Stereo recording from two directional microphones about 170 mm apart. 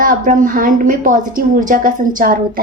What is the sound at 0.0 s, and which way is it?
A woman's voice, 55° right (ahead or behind).